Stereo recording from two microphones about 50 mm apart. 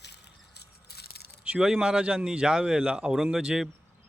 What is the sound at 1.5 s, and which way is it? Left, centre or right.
A man's voice, centre.